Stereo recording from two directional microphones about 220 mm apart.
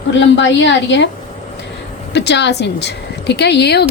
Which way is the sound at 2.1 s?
50° left (ahead or behind).